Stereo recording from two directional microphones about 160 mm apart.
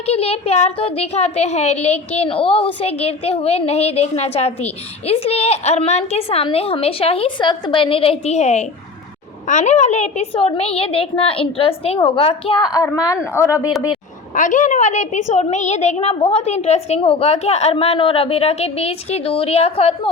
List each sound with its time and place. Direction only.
0.0 s a woman's voice: 40° left (ahead or behind); by 13.7 s 20° left (ahead or behind)
13.7 s a man's voice: 5° right (ahead or behind)
14.3 s a woman's voice: 50° left (ahead or behind)